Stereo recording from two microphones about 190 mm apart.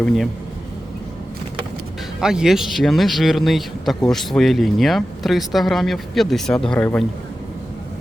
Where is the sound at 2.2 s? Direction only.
5° right (ahead or behind).